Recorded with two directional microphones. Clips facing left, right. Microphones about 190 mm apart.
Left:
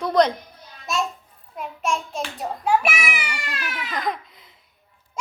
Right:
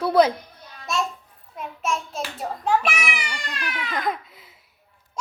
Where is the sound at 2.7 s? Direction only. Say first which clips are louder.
Left 1 dB; 10° left (ahead or behind).